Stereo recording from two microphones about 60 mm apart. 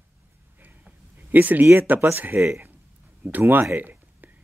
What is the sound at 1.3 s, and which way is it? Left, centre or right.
Speech, right.